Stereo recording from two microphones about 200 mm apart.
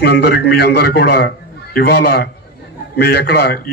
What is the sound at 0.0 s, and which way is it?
Speech, 50° left (ahead or behind).